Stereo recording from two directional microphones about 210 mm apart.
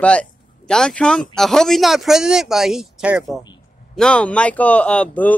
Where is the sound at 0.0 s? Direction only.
5° left (ahead or behind).